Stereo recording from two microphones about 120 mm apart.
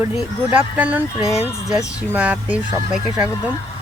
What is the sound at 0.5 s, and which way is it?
Speech, 10° right (ahead or behind).